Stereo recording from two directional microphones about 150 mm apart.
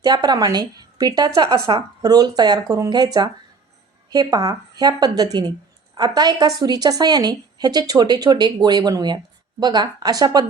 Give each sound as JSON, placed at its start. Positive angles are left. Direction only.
{"t": 0.0, "sound": "a woman's voice", "side_deg": -25}